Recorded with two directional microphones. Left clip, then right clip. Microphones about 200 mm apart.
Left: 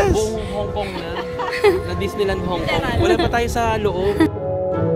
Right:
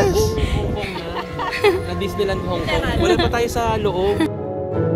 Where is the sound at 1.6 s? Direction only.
20° left (ahead or behind).